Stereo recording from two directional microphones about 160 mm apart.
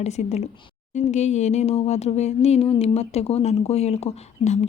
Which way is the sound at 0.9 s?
45° left (ahead or behind).